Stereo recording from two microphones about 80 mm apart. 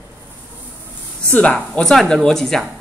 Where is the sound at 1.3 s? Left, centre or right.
Centre.